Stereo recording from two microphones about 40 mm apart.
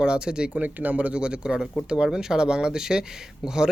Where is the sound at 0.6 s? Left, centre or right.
Right.